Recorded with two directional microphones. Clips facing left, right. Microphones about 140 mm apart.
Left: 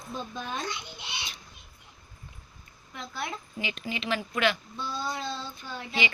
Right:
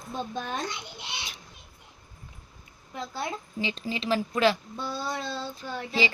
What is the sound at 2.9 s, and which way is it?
A woman's voice, 35° right (ahead or behind).